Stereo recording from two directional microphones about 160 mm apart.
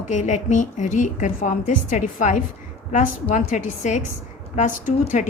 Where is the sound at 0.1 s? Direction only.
50° left (ahead or behind).